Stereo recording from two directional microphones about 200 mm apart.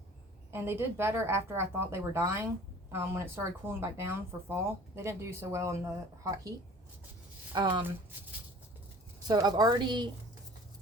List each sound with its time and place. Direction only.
0.5 s a woman's voice: 10° right (ahead or behind)
7.5 s a woman's voice: 20° right (ahead or behind)
9.2 s a woman's voice: 20° right (ahead or behind)